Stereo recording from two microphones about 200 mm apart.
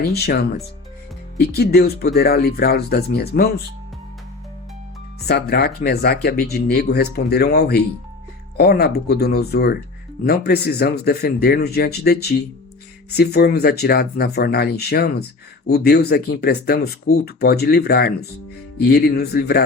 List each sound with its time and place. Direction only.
0.0 s speech: 50° left (ahead or behind)
5.3 s speech: 50° left (ahead or behind)